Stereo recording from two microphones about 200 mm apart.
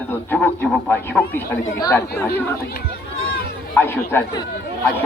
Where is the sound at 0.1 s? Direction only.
10° left (ahead or behind).